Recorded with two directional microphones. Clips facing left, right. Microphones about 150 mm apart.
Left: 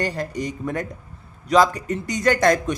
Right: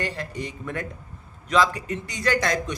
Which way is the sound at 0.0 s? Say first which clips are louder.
Left 5 dB; 40° left (ahead or behind).